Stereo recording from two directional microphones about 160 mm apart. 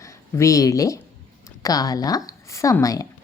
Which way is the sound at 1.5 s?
20° left (ahead or behind).